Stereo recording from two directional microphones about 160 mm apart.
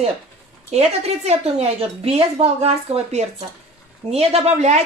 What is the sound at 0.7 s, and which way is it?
A woman's voice, 40° right (ahead or behind).